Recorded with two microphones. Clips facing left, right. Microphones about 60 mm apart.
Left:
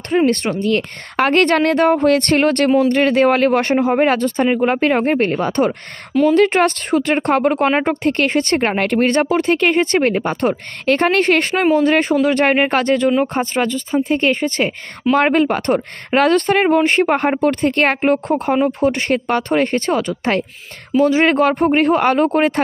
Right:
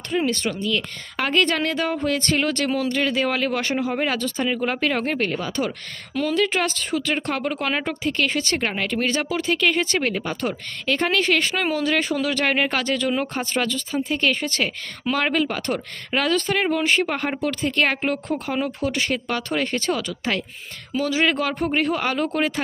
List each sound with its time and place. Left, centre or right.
0.1 s a woman's voice: left